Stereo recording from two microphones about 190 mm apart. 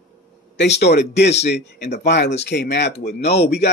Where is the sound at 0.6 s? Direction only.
60° left (ahead or behind).